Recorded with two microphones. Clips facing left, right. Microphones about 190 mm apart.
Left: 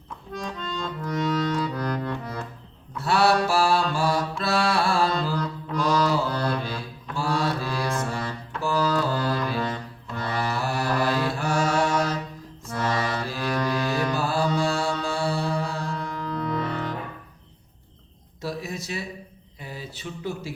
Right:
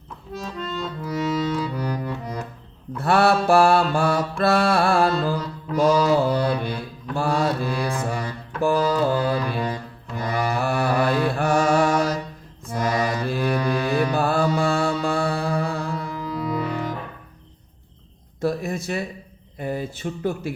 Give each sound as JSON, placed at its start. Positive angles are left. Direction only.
{"t": 0.3, "sound": "accordion", "side_deg": -5}
{"t": 3.0, "sound": "mantra", "side_deg": -55}
{"t": 3.4, "sound": "music", "side_deg": -55}
{"t": 3.9, "sound": "mantra", "side_deg": -55}
{"t": 4.4, "sound": "music", "side_deg": -55}
{"t": 6.2, "sound": "music", "side_deg": -10}
{"t": 6.6, "sound": "mantra", "side_deg": -55}
{"t": 7.7, "sound": "music", "side_deg": -15}
{"t": 10.6, "sound": "music", "side_deg": -60}
{"t": 11.3, "sound": "mantra", "side_deg": -55}
{"t": 12.7, "sound": "music", "side_deg": -10}
{"t": 14.1, "sound": "music", "side_deg": -55}
{"t": 16.0, "sound": "cello", "side_deg": -10}
{"t": 18.3, "sound": "a sound", "side_deg": -50}